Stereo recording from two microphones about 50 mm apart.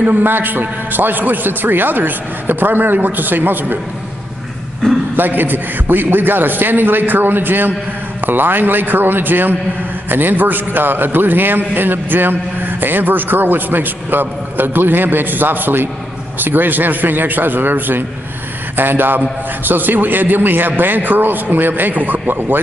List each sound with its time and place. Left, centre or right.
0.0 s a man's voice: right
5.1 s a man's voice: right